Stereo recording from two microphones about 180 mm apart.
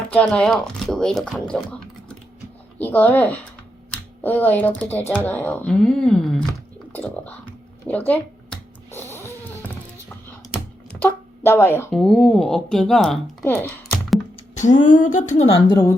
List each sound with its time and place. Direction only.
0.1 s speech: 5° left (ahead or behind)
2.7 s speech: 10° left (ahead or behind)
7.9 s a sound: 10° left (ahead or behind)
11.0 s a sound: 10° left (ahead or behind)
11.9 s speech: centre (ahead or behind)
14.3 s speech: 40° left (ahead or behind)
15.7 s speech: 20° left (ahead or behind)